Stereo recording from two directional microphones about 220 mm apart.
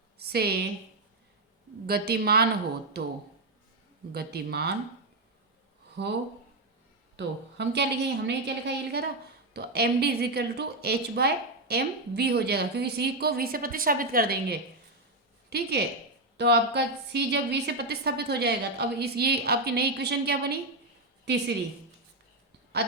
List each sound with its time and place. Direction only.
0.2 s a woman's voice: 45° right (ahead or behind)
1.9 s a woman's voice: 45° right (ahead or behind)
4.1 s a woman's voice: 45° right (ahead or behind)
6.0 s a woman's voice: 50° right (ahead or behind)
7.2 s a woman's voice: 50° right (ahead or behind)